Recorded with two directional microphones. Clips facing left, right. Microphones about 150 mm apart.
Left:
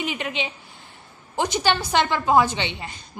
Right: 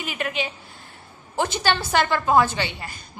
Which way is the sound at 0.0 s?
20° left (ahead or behind).